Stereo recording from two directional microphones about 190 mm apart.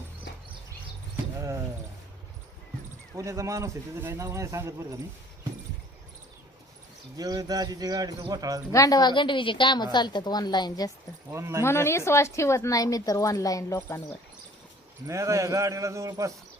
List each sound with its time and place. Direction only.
1.1 s cricket: 15° right (ahead or behind)
3.2 s speech: 15° right (ahead or behind)
7.2 s speech: 20° right (ahead or behind)
8.7 s a woman's voice: 20° left (ahead or behind)
11.3 s speech: 15° right (ahead or behind)
11.6 s a woman's voice: 15° left (ahead or behind)
15.0 s speech: 15° right (ahead or behind)